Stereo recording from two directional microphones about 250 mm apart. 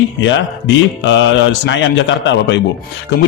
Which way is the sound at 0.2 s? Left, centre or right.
Left.